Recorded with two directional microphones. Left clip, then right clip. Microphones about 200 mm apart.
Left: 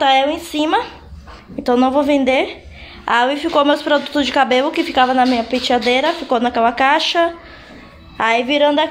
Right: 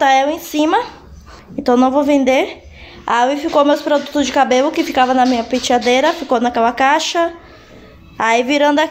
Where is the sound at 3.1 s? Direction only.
Centre (ahead or behind).